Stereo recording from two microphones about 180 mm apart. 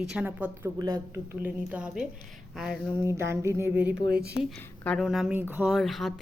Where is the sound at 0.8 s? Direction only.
20° right (ahead or behind).